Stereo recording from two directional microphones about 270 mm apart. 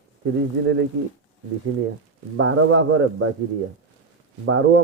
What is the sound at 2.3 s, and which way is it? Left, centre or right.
Speech, right.